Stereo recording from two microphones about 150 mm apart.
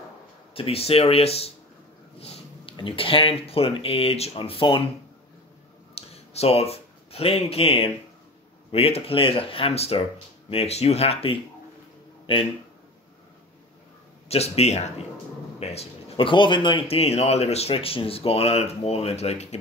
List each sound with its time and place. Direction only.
0.6 s speech: 40° left (ahead or behind)
5.9 s speech: 40° left (ahead or behind)
14.3 s speech: 45° left (ahead or behind)